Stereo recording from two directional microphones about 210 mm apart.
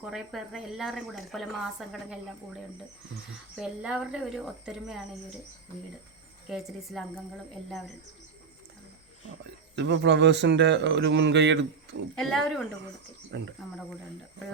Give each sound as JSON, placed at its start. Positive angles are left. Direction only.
{"t": 0.0, "sound": "speech", "side_deg": -5}
{"t": 3.5, "sound": "speech", "side_deg": -5}
{"t": 6.5, "sound": "speech", "side_deg": 0}
{"t": 9.7, "sound": "speech", "side_deg": -55}
{"t": 12.1, "sound": "speech", "side_deg": 0}
{"t": 13.3, "sound": "speech", "side_deg": -55}